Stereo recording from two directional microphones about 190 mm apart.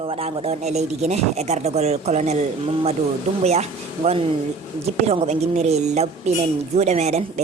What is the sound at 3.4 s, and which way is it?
Speech, 35° right (ahead or behind).